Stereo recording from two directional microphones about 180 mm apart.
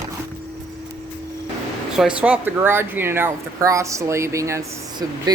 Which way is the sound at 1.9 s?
5° right (ahead or behind).